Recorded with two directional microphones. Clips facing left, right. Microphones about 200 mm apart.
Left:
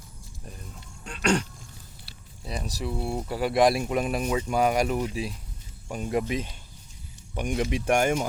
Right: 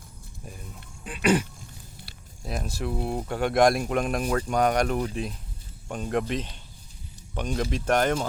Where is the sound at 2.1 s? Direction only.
55° right (ahead or behind).